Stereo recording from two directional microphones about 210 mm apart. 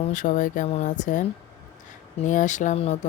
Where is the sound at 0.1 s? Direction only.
35° left (ahead or behind).